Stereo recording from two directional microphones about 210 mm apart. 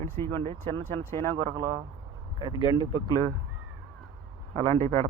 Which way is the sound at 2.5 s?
25° left (ahead or behind).